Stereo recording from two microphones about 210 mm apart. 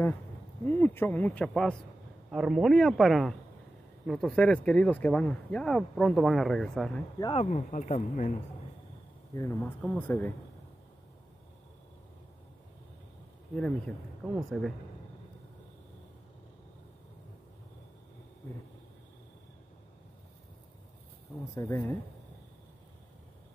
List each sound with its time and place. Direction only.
0.7 s speech: 10° left (ahead or behind)
7.3 s speech: 35° left (ahead or behind)
9.3 s speech: 15° left (ahead or behind)
13.6 s speech: 5° left (ahead or behind)
21.5 s speech: 15° left (ahead or behind)